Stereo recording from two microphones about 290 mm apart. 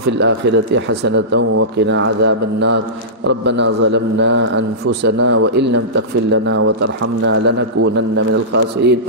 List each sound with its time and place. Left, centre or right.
0.0 s speech: right